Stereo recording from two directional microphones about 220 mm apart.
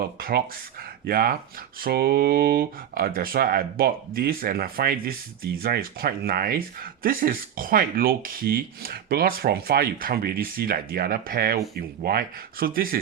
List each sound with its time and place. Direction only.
0.2 s speech: 40° right (ahead or behind)